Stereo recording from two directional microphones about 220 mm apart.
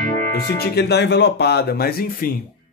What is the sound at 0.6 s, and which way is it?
Speech, 50° left (ahead or behind).